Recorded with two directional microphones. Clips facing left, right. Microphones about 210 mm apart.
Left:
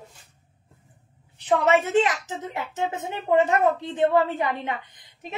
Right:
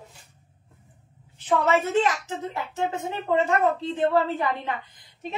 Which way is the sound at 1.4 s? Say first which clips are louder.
Left 2 dB; 20° left (ahead or behind).